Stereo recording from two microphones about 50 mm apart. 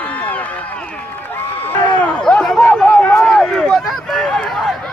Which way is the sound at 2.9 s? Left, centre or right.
Centre.